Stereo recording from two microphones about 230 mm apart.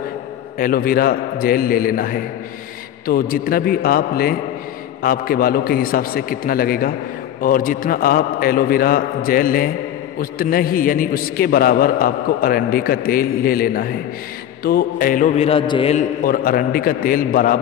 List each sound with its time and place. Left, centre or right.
0.6 s a man's voice: left
16.3 s a man's voice: left